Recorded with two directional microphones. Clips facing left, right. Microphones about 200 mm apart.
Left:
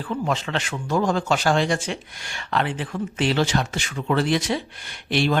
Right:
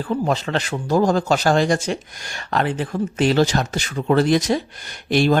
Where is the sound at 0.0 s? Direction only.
40° right (ahead or behind).